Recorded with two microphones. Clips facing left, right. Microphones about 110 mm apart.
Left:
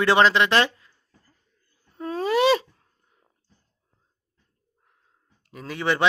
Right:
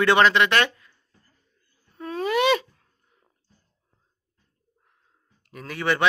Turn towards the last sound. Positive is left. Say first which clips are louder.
# even
turn(degrees=25)  # may be behind; listen again after turning